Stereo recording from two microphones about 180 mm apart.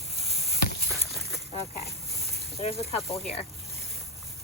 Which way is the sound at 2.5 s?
35° left (ahead or behind).